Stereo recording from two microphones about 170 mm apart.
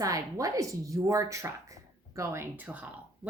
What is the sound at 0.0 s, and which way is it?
A woman's voice, 20° right (ahead or behind).